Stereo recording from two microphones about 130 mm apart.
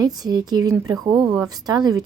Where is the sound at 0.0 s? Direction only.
30° right (ahead or behind).